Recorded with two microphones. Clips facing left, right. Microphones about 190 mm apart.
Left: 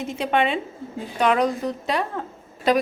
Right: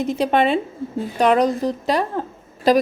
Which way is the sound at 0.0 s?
35° right (ahead or behind).